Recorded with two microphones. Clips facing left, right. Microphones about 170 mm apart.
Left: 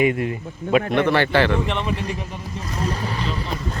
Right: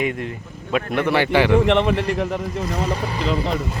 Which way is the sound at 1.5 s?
65° right (ahead or behind).